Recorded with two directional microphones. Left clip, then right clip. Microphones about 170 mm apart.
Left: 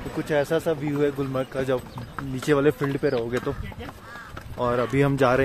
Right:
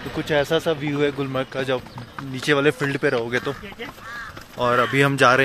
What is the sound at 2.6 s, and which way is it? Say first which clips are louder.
Speech: right 2 dB; centre (ahead or behind).